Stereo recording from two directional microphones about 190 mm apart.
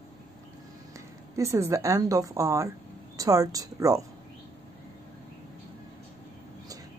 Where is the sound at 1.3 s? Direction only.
15° right (ahead or behind).